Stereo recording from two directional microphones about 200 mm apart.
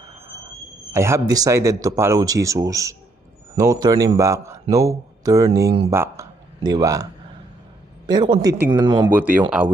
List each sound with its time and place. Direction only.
0.9 s speech: 15° right (ahead or behind)
8.1 s a man's voice: 20° right (ahead or behind)
9.1 s speech: 10° right (ahead or behind)